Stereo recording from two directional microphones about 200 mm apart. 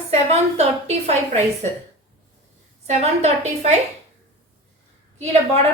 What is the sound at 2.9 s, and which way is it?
Speech, 35° right (ahead or behind).